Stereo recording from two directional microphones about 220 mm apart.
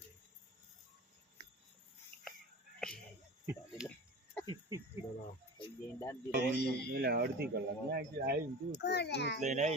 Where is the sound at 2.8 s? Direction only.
5° left (ahead or behind).